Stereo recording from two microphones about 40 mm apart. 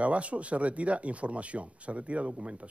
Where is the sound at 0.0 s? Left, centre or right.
Right.